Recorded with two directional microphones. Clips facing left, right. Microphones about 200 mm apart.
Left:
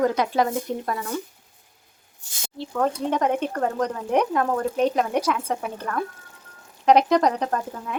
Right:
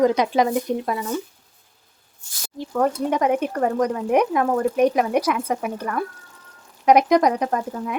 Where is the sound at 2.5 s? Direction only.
10° right (ahead or behind).